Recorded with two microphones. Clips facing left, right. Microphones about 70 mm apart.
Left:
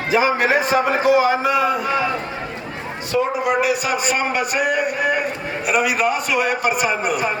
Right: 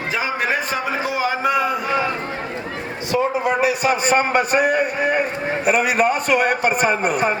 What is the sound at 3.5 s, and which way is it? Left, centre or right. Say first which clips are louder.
A man's voice: right 1 dB; right.